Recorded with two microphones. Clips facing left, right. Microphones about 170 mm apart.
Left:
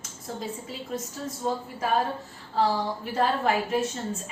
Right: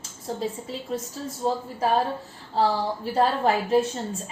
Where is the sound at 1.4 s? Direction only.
30° right (ahead or behind).